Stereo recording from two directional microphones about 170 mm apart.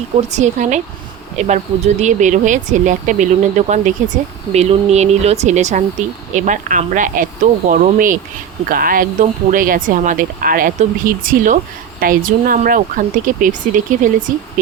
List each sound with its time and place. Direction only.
0.3 s speech: 45° right (ahead or behind)